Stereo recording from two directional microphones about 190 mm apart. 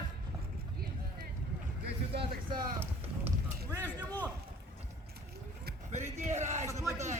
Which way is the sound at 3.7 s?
10° left (ahead or behind).